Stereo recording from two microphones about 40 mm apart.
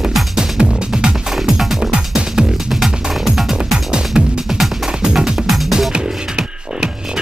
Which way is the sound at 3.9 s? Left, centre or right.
Centre.